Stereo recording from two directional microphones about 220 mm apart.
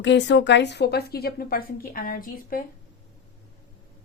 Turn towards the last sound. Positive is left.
turn(degrees=40)  # may be behind; listen again after turning